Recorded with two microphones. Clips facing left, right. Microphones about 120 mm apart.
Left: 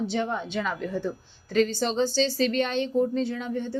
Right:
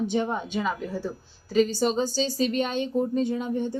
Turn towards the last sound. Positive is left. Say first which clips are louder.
# right 3 dB
turn(degrees=-15)  # may be behind; listen again after turning